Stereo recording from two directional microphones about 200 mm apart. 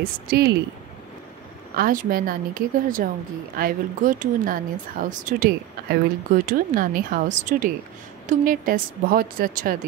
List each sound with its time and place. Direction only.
0.0 s speech: 50° right (ahead or behind)
1.8 s speech: 45° right (ahead or behind)